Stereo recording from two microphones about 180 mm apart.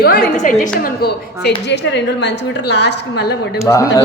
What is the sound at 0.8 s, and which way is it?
A woman's voice, 60° left (ahead or behind).